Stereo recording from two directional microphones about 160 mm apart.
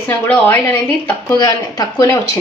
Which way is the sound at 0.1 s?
15° left (ahead or behind).